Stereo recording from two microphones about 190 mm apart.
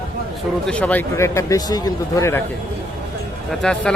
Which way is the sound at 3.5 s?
5° left (ahead or behind).